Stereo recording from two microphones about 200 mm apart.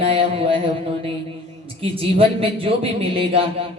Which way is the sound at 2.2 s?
30° right (ahead or behind).